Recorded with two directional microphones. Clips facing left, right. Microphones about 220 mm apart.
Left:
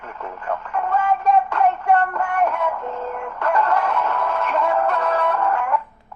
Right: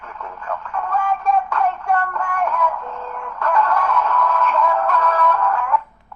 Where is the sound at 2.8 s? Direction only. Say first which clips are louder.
Left 4 dB; 35° left (ahead or behind).